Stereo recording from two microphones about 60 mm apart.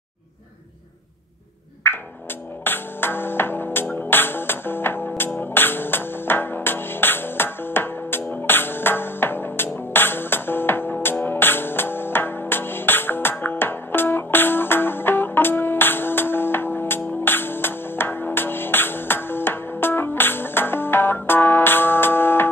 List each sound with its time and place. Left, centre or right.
1.8 s music: left